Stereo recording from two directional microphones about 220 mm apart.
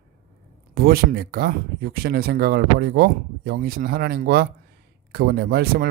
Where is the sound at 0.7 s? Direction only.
45° right (ahead or behind).